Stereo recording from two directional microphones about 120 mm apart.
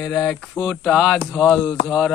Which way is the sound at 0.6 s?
Centre (ahead or behind).